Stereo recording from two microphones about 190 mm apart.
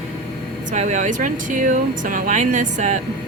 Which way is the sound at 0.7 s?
40° right (ahead or behind).